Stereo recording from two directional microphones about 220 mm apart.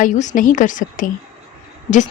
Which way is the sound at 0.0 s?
35° left (ahead or behind).